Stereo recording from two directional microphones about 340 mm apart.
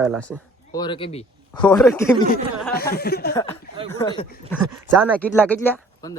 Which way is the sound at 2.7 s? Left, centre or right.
Left.